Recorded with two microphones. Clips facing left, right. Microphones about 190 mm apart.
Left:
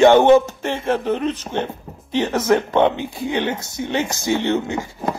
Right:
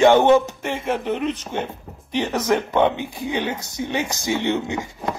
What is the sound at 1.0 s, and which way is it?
Speech, 15° right (ahead or behind).